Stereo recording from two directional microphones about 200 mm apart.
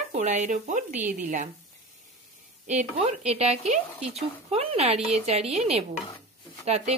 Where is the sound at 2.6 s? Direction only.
35° right (ahead or behind).